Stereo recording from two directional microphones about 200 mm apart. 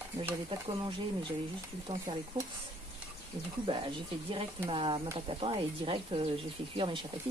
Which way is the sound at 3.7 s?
25° right (ahead or behind).